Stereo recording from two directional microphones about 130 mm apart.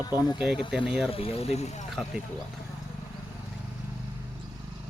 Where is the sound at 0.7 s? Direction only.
5° right (ahead or behind).